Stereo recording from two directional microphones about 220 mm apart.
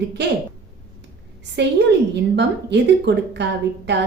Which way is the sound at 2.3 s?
50° right (ahead or behind).